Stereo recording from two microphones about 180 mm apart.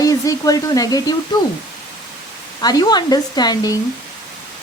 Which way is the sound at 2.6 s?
20° left (ahead or behind).